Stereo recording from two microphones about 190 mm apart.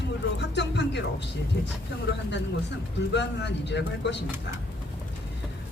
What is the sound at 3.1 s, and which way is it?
Speech, 65° left (ahead or behind).